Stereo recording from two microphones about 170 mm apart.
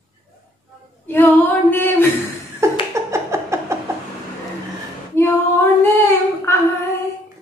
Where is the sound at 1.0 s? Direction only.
10° left (ahead or behind).